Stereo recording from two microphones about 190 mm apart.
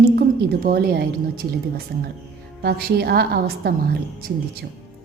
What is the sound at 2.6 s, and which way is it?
A woman's voice, 55° right (ahead or behind).